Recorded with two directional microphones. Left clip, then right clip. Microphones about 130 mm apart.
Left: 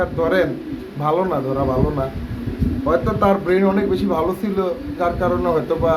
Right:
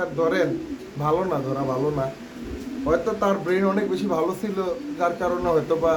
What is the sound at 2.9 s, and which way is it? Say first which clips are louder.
Speech: left 5 dB; centre (ahead or behind).